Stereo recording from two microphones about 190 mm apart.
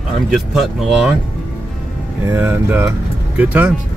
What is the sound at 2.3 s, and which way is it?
Speech, 10° right (ahead or behind).